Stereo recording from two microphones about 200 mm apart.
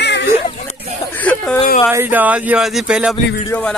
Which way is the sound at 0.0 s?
60° left (ahead or behind).